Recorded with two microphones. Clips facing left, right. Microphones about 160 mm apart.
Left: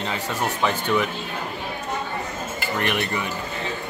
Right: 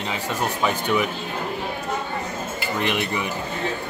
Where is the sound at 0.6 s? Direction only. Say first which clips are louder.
Even; 10° right (ahead or behind).